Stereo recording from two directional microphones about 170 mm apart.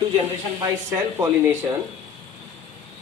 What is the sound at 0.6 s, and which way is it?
Speech, 15° right (ahead or behind).